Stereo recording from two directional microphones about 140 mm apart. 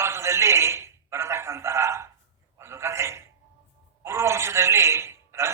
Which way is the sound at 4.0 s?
20° right (ahead or behind).